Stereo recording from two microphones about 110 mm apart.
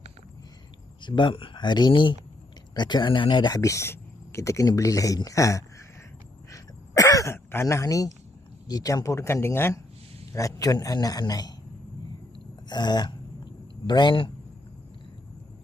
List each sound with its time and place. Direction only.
1.0 s speech: 45° left (ahead or behind)
3.6 s speech: 25° left (ahead or behind)
6.5 s throat clearing: 30° left (ahead or behind)
8.6 s a man's voice: 35° left (ahead or behind)
12.6 s a sound: 40° left (ahead or behind)